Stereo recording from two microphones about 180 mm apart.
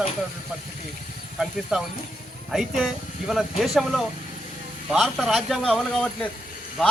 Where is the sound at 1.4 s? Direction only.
5° right (ahead or behind).